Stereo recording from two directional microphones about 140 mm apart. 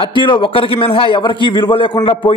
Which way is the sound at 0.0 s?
35° left (ahead or behind).